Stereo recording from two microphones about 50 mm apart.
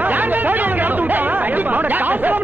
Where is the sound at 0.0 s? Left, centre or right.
Right.